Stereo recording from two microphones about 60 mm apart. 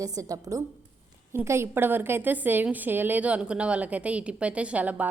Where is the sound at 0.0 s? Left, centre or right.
Right.